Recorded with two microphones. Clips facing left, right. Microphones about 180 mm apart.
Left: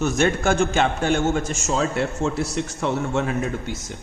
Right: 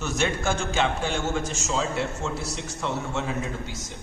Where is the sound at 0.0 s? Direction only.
50° left (ahead or behind).